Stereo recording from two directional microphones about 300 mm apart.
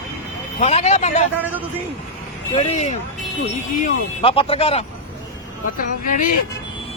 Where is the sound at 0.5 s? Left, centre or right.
Left.